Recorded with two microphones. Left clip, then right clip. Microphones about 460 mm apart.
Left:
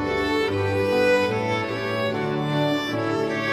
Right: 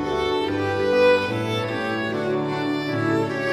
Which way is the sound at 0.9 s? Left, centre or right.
Right.